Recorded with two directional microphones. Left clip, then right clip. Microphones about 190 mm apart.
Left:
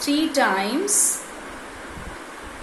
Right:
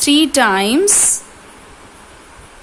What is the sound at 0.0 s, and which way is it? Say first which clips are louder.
Speech: right 8 dB; 45° right (ahead or behind).